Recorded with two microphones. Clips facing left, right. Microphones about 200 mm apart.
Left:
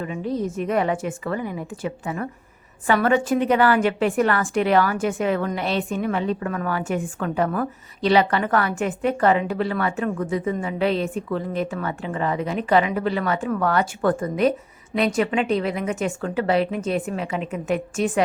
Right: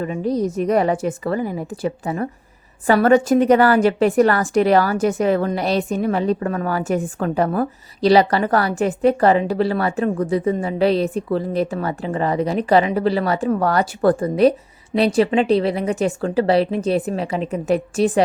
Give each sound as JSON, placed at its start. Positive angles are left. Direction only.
{"t": 0.0, "sound": "a woman's voice", "side_deg": -40}